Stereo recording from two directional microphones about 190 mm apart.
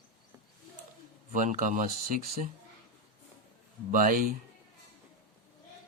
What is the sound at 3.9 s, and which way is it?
Speech, 45° right (ahead or behind).